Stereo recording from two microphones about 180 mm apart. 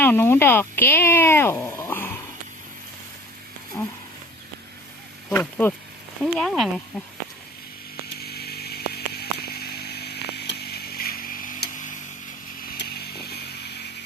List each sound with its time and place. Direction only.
0.0 s speech: 10° left (ahead or behind)
3.7 s a sound: 10° left (ahead or behind)
5.3 s speech: 10° left (ahead or behind)
8.2 s chainsaw: 60° left (ahead or behind); by 11.9 s 45° left (ahead or behind)
12.6 s chainsaw: 60° left (ahead or behind)